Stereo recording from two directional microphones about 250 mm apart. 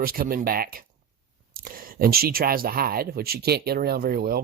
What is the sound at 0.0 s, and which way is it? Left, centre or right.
Speech, right.